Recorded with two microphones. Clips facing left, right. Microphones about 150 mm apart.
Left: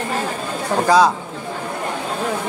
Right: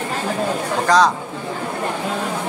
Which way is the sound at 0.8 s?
5° left (ahead or behind).